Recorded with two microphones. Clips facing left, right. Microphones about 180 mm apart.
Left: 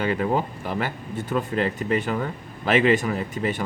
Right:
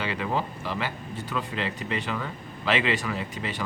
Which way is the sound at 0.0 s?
45° left (ahead or behind).